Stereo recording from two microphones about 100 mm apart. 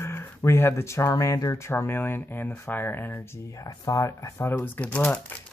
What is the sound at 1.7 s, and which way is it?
Speech, 20° left (ahead or behind).